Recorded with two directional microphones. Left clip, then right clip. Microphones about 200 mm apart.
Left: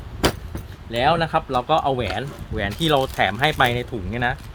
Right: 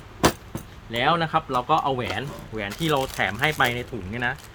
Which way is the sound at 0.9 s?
25° left (ahead or behind).